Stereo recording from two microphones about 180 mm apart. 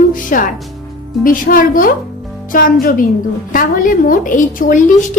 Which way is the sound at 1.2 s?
50° left (ahead or behind).